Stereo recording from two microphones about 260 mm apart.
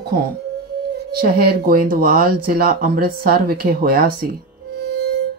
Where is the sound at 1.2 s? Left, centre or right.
Right.